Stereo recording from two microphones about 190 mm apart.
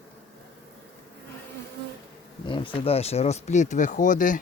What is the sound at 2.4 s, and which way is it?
Speech, 25° left (ahead or behind).